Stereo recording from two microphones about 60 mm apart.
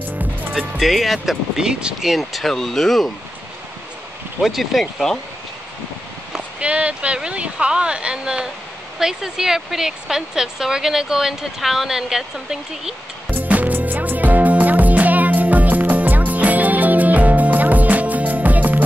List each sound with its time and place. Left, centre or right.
0.6 s speech: centre
4.4 s speech: centre
6.6 s speech: centre
13.3 s music: right